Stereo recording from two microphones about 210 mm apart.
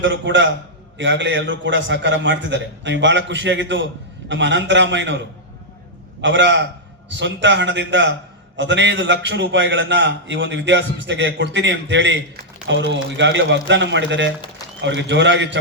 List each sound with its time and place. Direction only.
0.0 s a man's voice: 60° right (ahead or behind)
6.2 s a man's voice: 60° right (ahead or behind)